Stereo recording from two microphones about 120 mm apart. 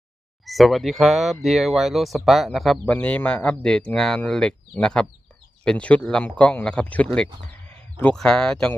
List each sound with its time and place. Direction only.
0.4 s speech: centre (ahead or behind)
2.8 s speech: 15° left (ahead or behind)